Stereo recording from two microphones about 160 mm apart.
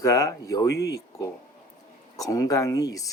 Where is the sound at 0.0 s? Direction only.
20° left (ahead or behind).